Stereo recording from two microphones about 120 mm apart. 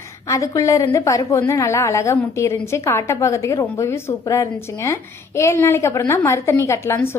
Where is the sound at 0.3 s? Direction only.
25° left (ahead or behind).